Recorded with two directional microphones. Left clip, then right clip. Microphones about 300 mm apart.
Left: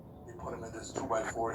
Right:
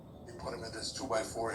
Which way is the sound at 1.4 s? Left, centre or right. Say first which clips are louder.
Left 2 dB; centre.